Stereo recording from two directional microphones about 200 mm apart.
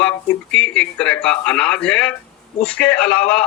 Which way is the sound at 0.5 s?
5° left (ahead or behind).